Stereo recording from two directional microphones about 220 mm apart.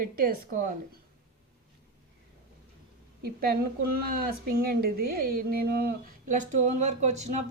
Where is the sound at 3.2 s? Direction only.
45° right (ahead or behind).